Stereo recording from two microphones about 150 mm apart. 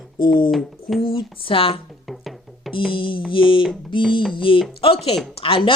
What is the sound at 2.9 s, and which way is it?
Speech, 35° left (ahead or behind).